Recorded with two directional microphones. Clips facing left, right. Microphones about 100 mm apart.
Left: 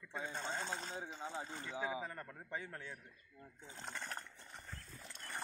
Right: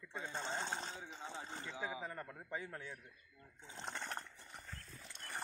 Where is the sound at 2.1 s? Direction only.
15° right (ahead or behind).